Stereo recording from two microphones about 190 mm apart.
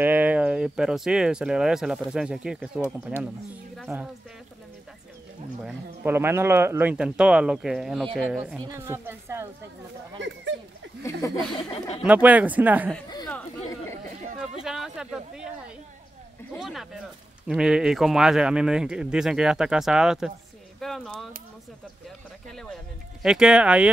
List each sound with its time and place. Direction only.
0.0 s speech: 10° right (ahead or behind)
3.9 s speech: 15° right (ahead or behind)
5.6 s speech: 5° right (ahead or behind)
6.1 s speech: 15° right (ahead or behind)
8.5 s a woman's voice: 20° right (ahead or behind)
10.1 s a sound: 75° right (ahead or behind)
11.0 s speech: 15° left (ahead or behind)
12.0 s speech: 10° right (ahead or behind)
14.4 s a sound: 5° right (ahead or behind)
16.5 s speech: centre (ahead or behind)
22.5 s a sound: centre (ahead or behind)
23.2 s speech: 5° right (ahead or behind)